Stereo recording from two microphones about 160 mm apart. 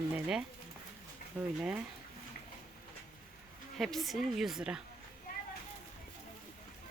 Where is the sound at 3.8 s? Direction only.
Centre (ahead or behind).